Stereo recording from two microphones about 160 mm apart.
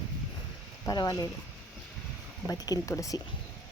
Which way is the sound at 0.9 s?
20° left (ahead or behind).